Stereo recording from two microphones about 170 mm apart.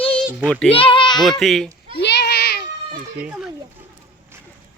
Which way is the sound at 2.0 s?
80° left.